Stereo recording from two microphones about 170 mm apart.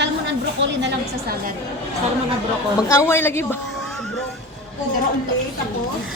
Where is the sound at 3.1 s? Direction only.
15° left (ahead or behind).